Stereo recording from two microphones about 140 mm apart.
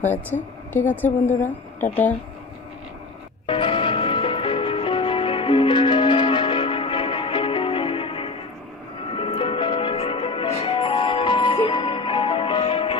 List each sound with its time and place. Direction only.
0.0 s a woman's voice: 15° left (ahead or behind)
3.4 s music: 35° left (ahead or behind)